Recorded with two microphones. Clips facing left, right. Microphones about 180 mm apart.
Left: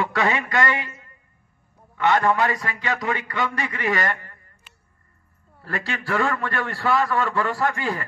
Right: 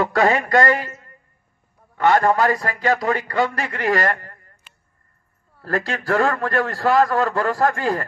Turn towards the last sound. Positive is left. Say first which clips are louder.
# right 5 dB
turn(degrees=-40)  # may be behind; listen again after turning